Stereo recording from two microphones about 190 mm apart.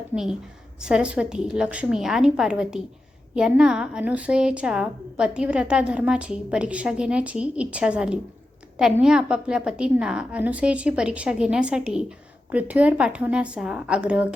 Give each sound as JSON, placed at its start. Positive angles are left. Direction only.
{"t": 0.8, "sound": "a woman's voice", "side_deg": -5}